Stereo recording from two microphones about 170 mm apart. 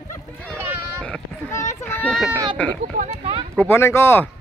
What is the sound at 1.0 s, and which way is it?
Sheep, 5° left (ahead or behind).